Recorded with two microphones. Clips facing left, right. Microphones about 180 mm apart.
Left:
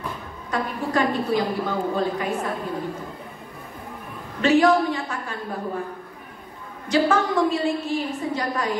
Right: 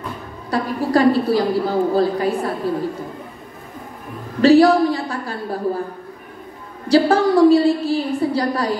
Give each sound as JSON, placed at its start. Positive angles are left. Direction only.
{"t": 0.5, "sound": "a woman's voice", "side_deg": -35}
{"t": 4.4, "sound": "a woman's voice", "side_deg": -35}
{"t": 6.9, "sound": "a woman's voice", "side_deg": -35}